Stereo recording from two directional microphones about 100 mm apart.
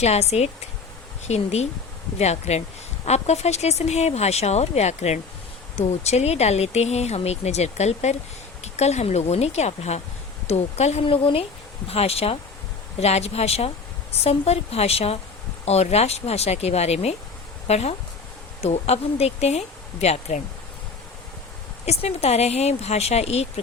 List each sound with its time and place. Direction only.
0.0 s speech: 90° left; by 11.4 s 65° left (ahead or behind)
11.9 s speech: 85° left
21.8 s speech: 90° left